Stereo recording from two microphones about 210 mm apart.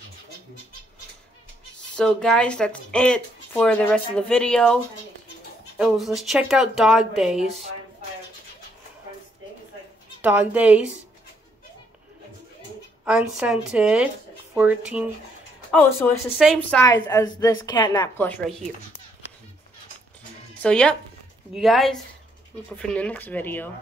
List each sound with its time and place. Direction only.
2.0 s speech: 5° left (ahead or behind)
5.8 s speech: centre (ahead or behind)
10.2 s a woman's voice: 10° right (ahead or behind)
13.0 s speech: 5° right (ahead or behind)
15.7 s a woman's voice: 10° left (ahead or behind)
18.1 s a woman's voice: 10° left (ahead or behind)
20.6 s a woman's voice: 5° left (ahead or behind)